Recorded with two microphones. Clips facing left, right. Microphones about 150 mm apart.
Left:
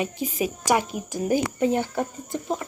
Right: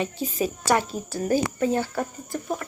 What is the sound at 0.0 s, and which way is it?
Speech, 15° left (ahead or behind).